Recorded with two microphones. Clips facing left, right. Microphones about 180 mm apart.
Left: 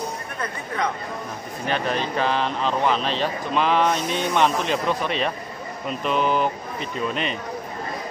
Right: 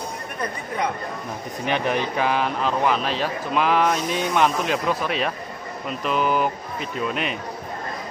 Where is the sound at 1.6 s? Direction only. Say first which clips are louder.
Right 1 dB; 15° right (ahead or behind).